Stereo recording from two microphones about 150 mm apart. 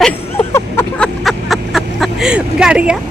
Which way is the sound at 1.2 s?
Centre (ahead or behind).